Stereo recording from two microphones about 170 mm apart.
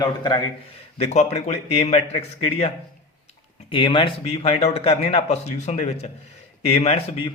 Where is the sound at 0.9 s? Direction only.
40° left (ahead or behind).